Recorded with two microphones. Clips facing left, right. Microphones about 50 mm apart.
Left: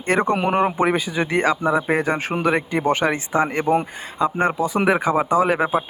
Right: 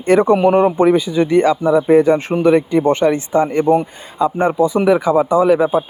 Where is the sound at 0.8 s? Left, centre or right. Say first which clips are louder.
Right 7 dB; centre.